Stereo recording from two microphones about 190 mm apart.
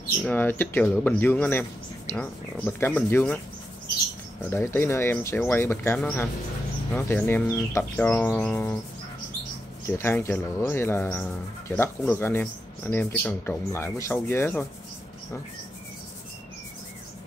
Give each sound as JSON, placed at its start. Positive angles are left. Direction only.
{"t": 0.3, "sound": "speech", "side_deg": 10}
{"t": 4.5, "sound": "speech", "side_deg": 10}
{"t": 9.8, "sound": "speech", "side_deg": 15}